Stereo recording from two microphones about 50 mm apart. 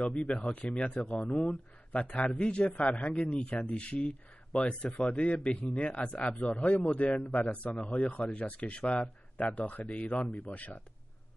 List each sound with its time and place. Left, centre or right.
0.0 s speech: centre
1.0 s speech: centre
1.9 s speech: left